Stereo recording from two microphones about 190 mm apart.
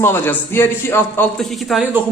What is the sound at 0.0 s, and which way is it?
A man's voice, 10° left (ahead or behind).